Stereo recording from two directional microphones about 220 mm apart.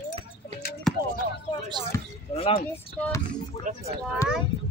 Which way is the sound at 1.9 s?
15° left (ahead or behind).